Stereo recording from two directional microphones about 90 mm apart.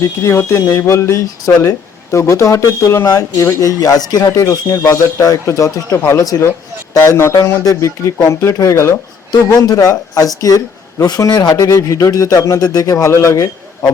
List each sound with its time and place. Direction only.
0.0 s speech: 30° left (ahead or behind); by 11.7 s 50° left (ahead or behind)
11.7 s speech: 35° left (ahead or behind)